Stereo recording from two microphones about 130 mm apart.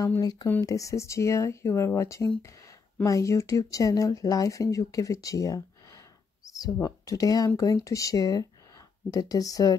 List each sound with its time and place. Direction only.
0.2 s speech: 30° left (ahead or behind)